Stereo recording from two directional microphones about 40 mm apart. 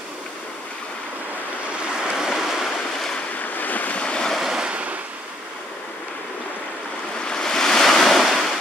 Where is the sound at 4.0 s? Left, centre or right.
Left.